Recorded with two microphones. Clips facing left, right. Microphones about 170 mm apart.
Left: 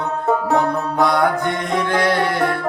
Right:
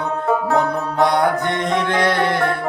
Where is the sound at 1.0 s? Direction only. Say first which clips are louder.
Right 1 dB; 25° right (ahead or behind).